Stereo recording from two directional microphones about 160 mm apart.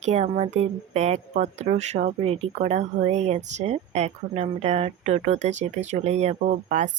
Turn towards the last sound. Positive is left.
turn(degrees=-50)  # may be behind; listen again after turning